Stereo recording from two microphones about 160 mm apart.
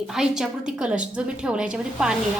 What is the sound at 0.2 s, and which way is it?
A woman's voice, 5° right (ahead or behind).